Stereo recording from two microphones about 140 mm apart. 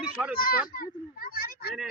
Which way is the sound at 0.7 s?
90° left.